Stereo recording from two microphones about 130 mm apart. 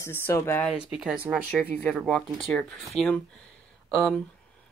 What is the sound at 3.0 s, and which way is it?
Speech, 5° left (ahead or behind).